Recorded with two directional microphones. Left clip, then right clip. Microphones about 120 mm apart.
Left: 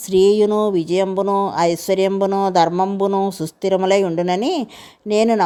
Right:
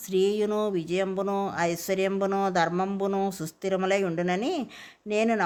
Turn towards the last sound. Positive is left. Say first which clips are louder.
# left 9 dB
turn(degrees=55)  # may be behind; listen again after turning